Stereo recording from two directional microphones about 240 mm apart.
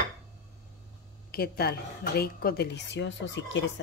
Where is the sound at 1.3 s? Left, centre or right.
Left.